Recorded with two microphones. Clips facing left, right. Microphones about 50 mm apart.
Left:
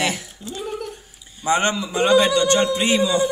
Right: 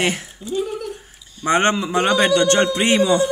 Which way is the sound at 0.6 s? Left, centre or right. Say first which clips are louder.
Right 4 dB; centre.